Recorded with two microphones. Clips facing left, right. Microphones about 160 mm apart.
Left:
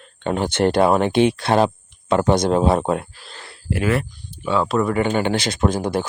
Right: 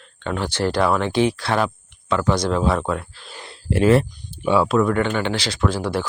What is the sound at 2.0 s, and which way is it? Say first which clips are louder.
Speech: left 3 dB; 55° left (ahead or behind).